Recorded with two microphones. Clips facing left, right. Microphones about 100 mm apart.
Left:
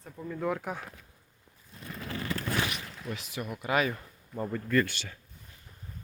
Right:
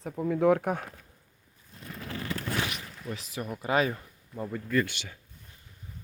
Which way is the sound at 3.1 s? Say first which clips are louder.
Right 1 dB; 35° right (ahead or behind).